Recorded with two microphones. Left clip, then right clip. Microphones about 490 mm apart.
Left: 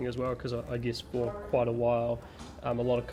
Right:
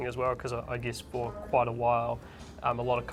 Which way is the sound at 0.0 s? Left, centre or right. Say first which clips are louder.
Right 2 dB; right.